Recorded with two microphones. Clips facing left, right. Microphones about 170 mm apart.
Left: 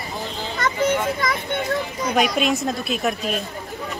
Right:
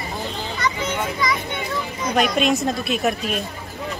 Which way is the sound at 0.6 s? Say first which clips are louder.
Left 5 dB; 45° left (ahead or behind).